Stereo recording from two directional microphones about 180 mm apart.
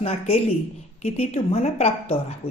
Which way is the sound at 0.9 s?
35° left (ahead or behind).